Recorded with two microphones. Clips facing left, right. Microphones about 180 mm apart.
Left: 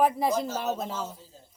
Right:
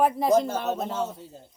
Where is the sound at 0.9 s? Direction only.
65° right (ahead or behind).